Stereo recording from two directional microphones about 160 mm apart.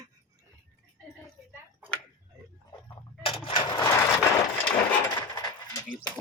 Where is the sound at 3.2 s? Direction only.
35° left (ahead or behind).